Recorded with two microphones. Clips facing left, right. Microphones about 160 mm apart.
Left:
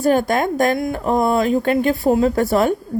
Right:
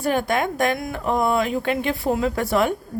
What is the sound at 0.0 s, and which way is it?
A woman's voice, 40° left (ahead or behind).